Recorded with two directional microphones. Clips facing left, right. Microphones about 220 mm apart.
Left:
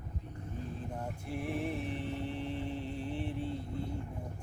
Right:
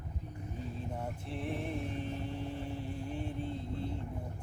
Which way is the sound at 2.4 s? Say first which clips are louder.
Left 2 dB; 15° right (ahead or behind).